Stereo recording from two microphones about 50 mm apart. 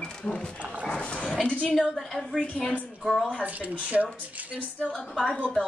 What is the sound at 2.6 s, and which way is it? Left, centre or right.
Speech, left.